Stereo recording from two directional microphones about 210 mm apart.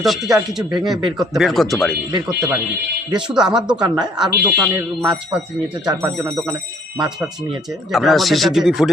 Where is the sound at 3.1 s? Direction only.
5° right (ahead or behind).